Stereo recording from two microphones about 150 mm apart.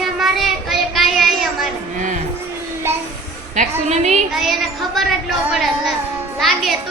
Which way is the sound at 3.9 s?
50° right (ahead or behind).